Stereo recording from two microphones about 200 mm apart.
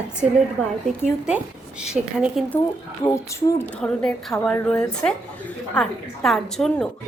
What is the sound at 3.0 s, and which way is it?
A woman's voice, 15° left (ahead or behind).